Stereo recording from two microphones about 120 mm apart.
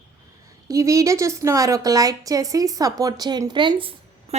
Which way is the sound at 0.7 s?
25° right (ahead or behind).